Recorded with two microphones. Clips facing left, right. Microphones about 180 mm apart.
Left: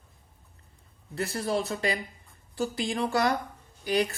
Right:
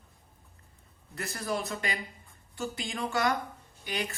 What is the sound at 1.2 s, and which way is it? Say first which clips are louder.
A woman's voice: left 5 dB; 30° left (ahead or behind).